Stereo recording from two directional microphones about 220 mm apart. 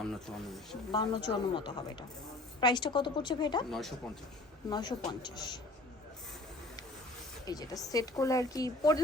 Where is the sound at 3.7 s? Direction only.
Centre (ahead or behind).